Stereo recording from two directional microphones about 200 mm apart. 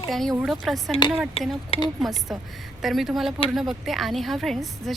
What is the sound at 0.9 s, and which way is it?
Speech, 25° left (ahead or behind).